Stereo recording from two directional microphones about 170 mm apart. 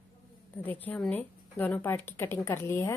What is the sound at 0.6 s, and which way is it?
Speech, 10° left (ahead or behind).